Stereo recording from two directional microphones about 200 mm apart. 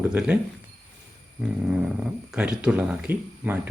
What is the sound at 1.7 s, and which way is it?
Speech, 5° right (ahead or behind).